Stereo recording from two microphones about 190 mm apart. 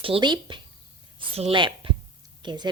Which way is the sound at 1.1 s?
30° right (ahead or behind).